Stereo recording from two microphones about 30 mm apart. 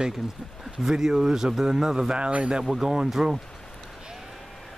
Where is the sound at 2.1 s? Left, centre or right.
Right.